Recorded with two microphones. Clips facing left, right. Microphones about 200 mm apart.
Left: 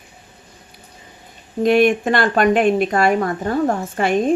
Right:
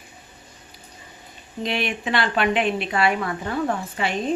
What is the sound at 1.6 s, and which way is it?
Speech, 45° left (ahead or behind).